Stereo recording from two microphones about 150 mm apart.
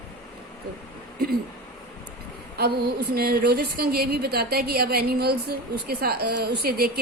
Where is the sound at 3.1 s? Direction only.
90° right.